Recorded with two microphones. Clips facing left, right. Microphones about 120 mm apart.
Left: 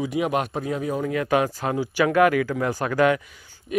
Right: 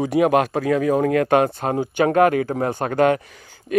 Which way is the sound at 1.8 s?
45° right (ahead or behind).